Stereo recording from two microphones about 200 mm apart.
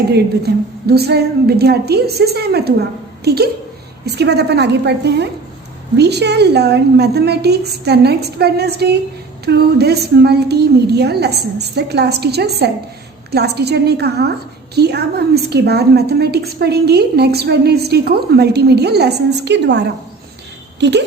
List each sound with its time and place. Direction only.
0.1 s a woman's voice: 55° right (ahead or behind)